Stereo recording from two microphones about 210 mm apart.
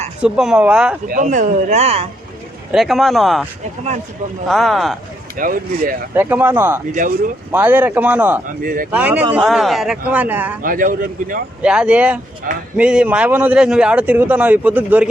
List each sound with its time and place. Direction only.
0.2 s speech: 5° right (ahead or behind)
1.0 s speech: 40° right (ahead or behind)
2.7 s speech: centre (ahead or behind)
4.4 s speech: centre (ahead or behind)
5.4 s speech: 40° right (ahead or behind)
6.1 s a man's voice: 10° right (ahead or behind)
8.6 s speech: 40° right (ahead or behind)
8.9 s a man's voice: 5° right (ahead or behind)
10.6 s speech: 40° right (ahead or behind)
11.6 s a man's voice: 5° right (ahead or behind)